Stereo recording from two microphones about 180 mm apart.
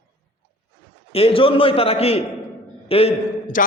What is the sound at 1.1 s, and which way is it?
A man's voice, 30° left (ahead or behind).